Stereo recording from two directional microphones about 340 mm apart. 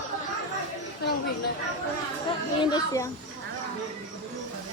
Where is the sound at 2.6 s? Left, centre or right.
Centre.